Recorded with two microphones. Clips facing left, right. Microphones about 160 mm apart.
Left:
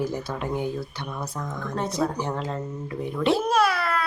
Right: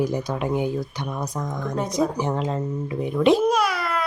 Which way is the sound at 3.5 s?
15° right (ahead or behind).